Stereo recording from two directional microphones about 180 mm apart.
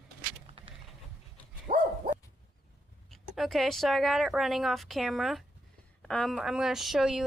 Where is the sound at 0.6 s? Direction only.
30° right (ahead or behind).